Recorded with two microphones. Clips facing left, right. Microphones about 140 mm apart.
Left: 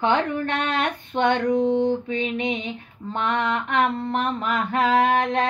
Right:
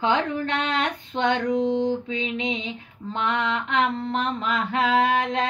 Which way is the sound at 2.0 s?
50° left (ahead or behind).